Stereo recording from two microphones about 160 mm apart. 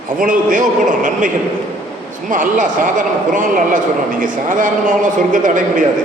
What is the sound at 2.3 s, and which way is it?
Speech, 55° right (ahead or behind).